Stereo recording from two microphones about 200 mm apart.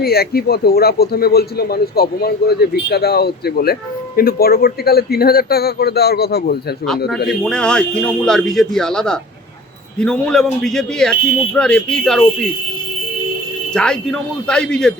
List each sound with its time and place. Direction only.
0.0 s a man's voice: 50° left (ahead or behind)
7.3 s speech: 5° left (ahead or behind)
13.7 s speech: 5° left (ahead or behind)